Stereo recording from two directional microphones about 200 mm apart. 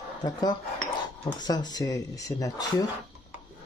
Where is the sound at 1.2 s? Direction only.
20° left (ahead or behind).